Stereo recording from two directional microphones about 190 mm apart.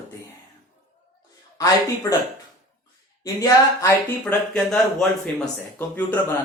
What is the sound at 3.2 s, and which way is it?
Speech, 20° left (ahead or behind).